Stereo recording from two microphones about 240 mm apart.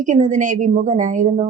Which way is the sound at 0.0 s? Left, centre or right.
Right.